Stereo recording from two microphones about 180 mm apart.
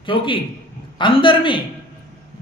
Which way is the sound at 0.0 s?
30° left (ahead or behind).